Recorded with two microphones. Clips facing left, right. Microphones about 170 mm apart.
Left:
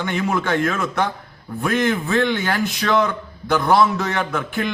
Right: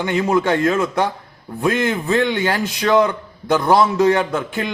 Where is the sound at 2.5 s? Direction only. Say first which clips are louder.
Right 3 dB; 20° right (ahead or behind).